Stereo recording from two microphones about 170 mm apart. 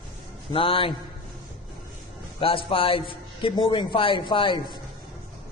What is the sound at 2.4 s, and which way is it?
A man's voice, 35° left (ahead or behind).